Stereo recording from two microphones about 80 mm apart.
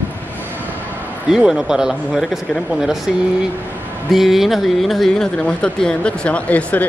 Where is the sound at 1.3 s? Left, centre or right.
Centre.